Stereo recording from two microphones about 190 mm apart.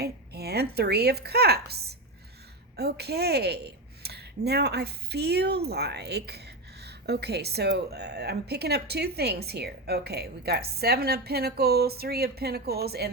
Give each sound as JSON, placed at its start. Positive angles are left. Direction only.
{"t": 0.0, "sound": "a woman's voice", "side_deg": -55}